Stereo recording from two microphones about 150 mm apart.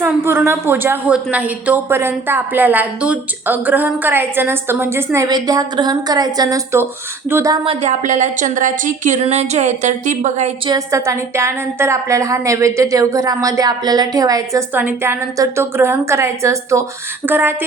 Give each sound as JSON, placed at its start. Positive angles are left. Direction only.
{"t": 0.0, "sound": "a woman's voice", "side_deg": -15}
{"t": 7.6, "sound": "speech", "side_deg": -45}
{"t": 10.7, "sound": "a woman's voice", "side_deg": -20}
{"t": 14.7, "sound": "speech", "side_deg": -10}